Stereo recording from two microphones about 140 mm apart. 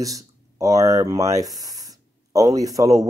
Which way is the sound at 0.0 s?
25° right (ahead or behind).